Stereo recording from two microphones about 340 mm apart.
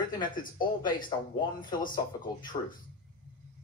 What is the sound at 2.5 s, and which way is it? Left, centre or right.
Speech, centre.